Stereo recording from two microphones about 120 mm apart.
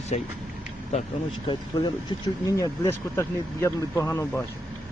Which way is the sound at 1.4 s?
40° left (ahead or behind).